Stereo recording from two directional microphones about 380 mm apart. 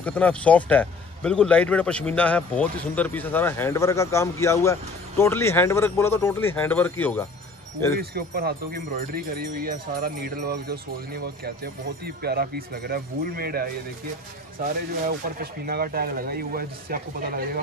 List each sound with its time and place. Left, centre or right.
0.0 s a man's voice: centre
7.9 s speech: right